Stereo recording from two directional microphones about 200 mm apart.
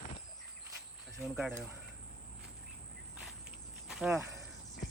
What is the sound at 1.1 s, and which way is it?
Speech, 5° right (ahead or behind).